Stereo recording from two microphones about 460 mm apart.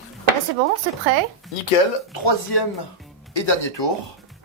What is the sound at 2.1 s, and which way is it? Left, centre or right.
Speech, left.